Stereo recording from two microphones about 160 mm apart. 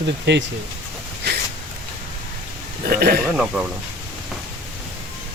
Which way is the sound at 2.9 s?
70° right (ahead or behind).